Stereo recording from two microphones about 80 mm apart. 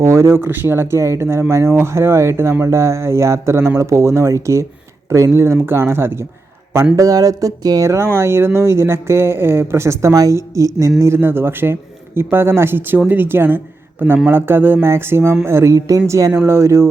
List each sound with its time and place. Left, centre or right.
0.0 s speech: right
6.9 s speech: right
7.9 s a man's voice: right